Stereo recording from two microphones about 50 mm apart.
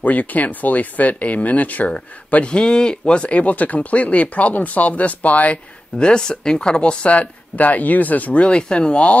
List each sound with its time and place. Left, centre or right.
0.0 s speech: left
2.3 s speech: centre
5.9 s speech: centre